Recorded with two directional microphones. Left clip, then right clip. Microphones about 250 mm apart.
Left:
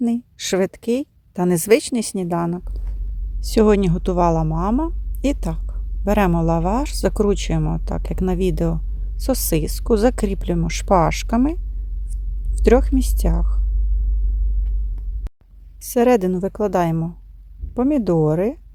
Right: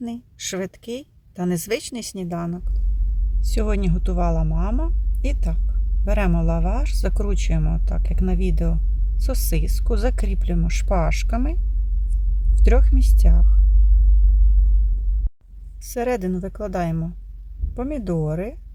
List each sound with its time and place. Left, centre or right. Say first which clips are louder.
0.0 s speech: left 8 dB; left
12.5 s speech: left 9 dB; left
15.8 s speech: left 8 dB; left